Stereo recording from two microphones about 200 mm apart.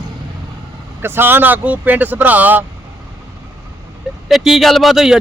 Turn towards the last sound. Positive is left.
turn(degrees=0)  # may be behind; listen again after turning